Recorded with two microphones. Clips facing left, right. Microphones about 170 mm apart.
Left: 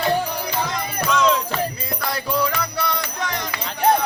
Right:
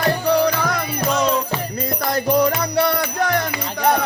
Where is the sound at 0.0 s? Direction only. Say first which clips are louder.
Right 5 dB; 70° right (ahead or behind).